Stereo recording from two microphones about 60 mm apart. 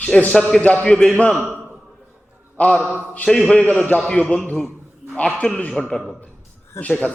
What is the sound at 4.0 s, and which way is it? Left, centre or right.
Speech, centre.